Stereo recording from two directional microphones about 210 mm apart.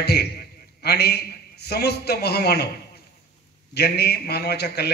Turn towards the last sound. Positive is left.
turn(degrees=50)  # may be behind; listen again after turning